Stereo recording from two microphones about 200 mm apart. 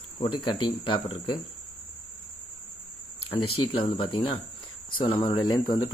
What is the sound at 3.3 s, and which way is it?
Speech, 25° left (ahead or behind).